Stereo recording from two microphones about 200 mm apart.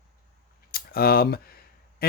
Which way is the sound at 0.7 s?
50° left (ahead or behind).